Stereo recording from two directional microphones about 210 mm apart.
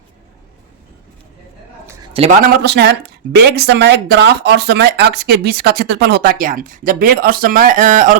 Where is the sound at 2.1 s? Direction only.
30° right (ahead or behind).